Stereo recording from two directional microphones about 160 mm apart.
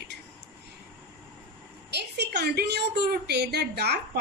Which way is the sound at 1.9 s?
90° right.